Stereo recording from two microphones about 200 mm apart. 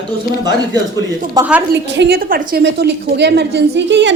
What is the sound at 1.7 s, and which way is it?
A woman's voice, 60° right (ahead or behind).